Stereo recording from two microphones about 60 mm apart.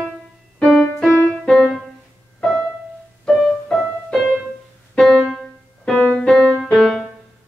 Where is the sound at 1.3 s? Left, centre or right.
Centre.